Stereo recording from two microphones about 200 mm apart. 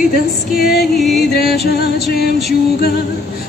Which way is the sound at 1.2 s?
50° left (ahead or behind).